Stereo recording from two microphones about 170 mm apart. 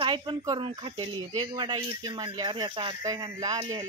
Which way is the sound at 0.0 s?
30° right (ahead or behind).